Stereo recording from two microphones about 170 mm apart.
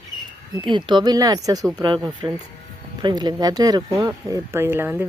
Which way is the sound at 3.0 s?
25° right (ahead or behind).